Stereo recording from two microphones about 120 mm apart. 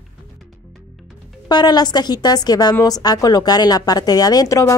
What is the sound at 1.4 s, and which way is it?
A woman's voice, 35° left (ahead or behind).